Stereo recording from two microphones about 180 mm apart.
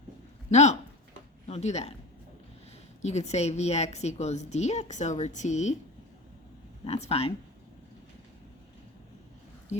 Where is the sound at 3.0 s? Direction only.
40° left (ahead or behind).